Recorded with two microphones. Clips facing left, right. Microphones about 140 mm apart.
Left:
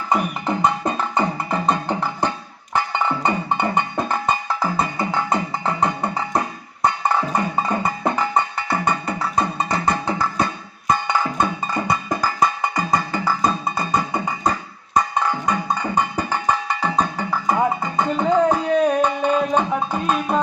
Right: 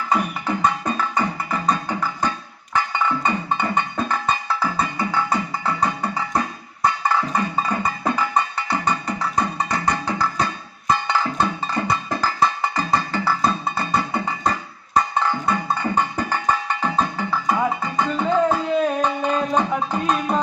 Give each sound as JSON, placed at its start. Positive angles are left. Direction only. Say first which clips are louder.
{"t": 0.1, "sound": "music", "louder": "left 2 dB", "side_deg": 25}